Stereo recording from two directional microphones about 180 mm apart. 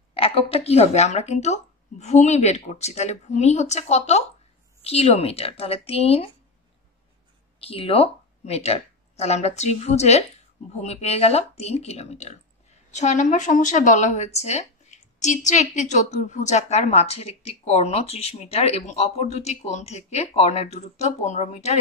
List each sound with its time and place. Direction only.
0.1 s a woman's voice: 30° left (ahead or behind)
7.6 s a woman's voice: 30° left (ahead or behind)